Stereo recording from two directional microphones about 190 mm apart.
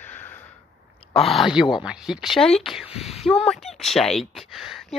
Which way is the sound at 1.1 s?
Centre (ahead or behind).